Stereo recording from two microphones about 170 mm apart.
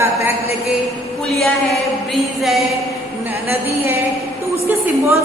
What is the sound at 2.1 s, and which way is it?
Speech, centre (ahead or behind).